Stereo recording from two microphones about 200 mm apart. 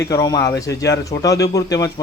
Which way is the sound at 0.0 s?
15° left (ahead or behind).